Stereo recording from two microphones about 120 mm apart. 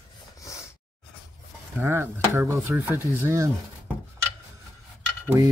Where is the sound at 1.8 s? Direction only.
20° right (ahead or behind).